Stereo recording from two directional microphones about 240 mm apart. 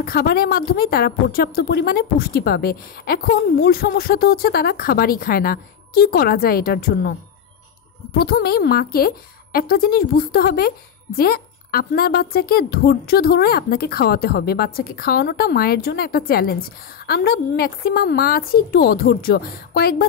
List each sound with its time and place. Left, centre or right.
0.0 s a woman's voice: left
8.1 s a woman's voice: left